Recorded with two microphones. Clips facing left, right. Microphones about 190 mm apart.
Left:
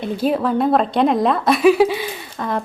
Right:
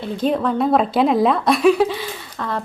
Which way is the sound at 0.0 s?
5° left (ahead or behind).